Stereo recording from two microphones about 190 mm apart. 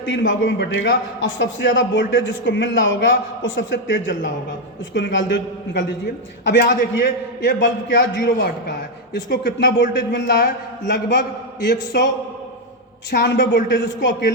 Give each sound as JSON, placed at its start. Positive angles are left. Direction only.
{"t": 0.0, "sound": "a man's voice", "side_deg": 75}
{"t": 6.6, "sound": "a man's voice", "side_deg": 55}